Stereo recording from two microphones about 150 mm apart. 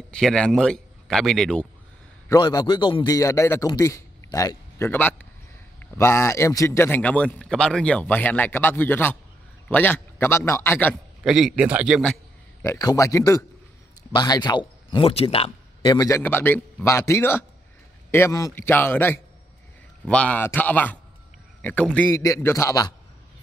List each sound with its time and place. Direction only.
0.1 s speech: 5° left (ahead or behind)
2.2 s a man's voice: 25° left (ahead or behind)
3.2 s a man's voice: 20° left (ahead or behind)
11.2 s a man's voice: 5° right (ahead or behind)
12.6 s a man's voice: 20° left (ahead or behind)
16.2 s a man's voice: 15° left (ahead or behind)
22.1 s a man's voice: 20° left (ahead or behind)